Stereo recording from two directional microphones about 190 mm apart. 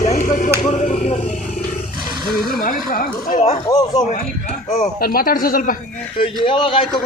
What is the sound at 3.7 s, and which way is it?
Speech, 20° left (ahead or behind).